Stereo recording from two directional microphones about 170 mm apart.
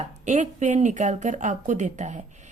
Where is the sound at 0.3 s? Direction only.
45° right (ahead or behind).